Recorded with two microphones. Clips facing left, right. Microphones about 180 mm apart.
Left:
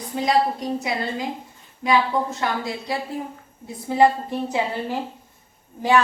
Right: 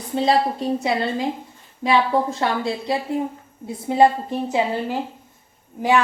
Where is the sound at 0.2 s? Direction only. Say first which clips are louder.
Right 1 dB; 30° right (ahead or behind).